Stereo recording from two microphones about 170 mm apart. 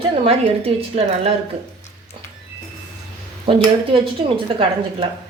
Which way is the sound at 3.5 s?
35° right (ahead or behind).